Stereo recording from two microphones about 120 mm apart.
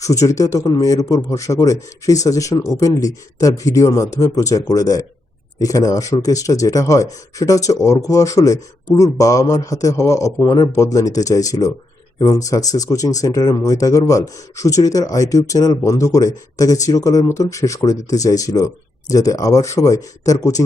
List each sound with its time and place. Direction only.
0.0 s speech: 25° left (ahead or behind)